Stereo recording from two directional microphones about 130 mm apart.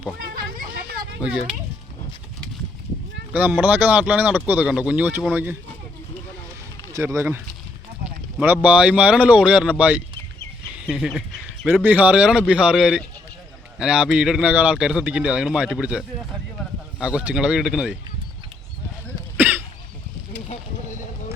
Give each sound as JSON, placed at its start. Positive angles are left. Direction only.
{"t": 1.2, "sound": "speech", "side_deg": -5}
{"t": 3.3, "sound": "speech", "side_deg": -15}
{"t": 6.9, "sound": "speech", "side_deg": -20}
{"t": 8.0, "sound": "a sound", "side_deg": -10}
{"t": 8.6, "sound": "speech", "side_deg": -10}
{"t": 19.4, "sound": "cough", "side_deg": -15}